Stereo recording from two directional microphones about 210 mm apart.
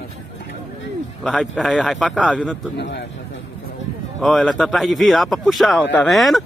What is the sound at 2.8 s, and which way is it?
Speech, 55° left (ahead or behind).